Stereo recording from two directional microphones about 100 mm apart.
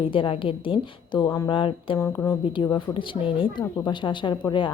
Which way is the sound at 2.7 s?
60° left (ahead or behind).